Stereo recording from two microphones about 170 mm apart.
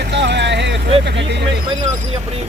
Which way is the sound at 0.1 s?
90° right.